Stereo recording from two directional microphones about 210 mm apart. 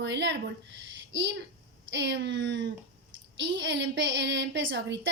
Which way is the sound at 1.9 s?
60° right (ahead or behind).